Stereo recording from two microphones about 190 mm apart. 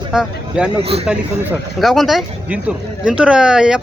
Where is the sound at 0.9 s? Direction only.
30° right (ahead or behind).